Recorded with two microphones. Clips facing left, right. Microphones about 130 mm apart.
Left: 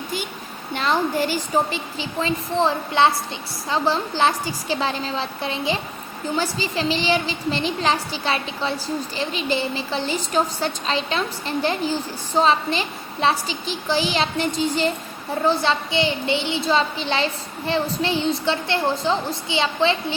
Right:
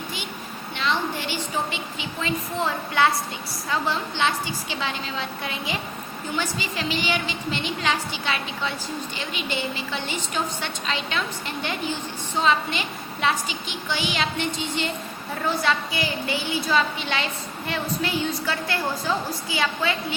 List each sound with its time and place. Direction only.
0.8 s a woman's voice: 45° left (ahead or behind)
15.6 s a woman's voice: 25° left (ahead or behind)